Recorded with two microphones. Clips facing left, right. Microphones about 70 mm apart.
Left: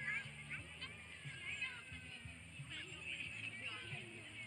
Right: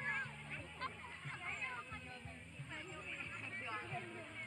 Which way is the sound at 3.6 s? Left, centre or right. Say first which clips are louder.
Right 6 dB; right.